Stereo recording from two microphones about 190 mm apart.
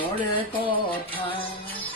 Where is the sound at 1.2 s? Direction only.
25° left (ahead or behind).